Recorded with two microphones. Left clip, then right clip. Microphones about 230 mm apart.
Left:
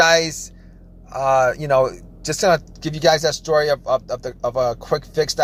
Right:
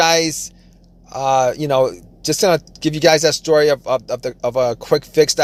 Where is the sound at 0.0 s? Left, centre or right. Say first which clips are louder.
Even; right.